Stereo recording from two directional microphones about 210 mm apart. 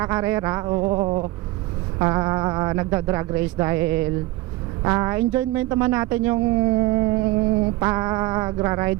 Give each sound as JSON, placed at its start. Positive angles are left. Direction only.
{"t": 0.0, "sound": "speech", "side_deg": -15}